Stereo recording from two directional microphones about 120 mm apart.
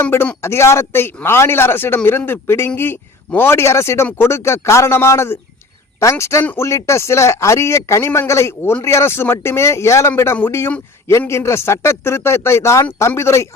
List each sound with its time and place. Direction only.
0.0 s a man's voice: 15° left (ahead or behind)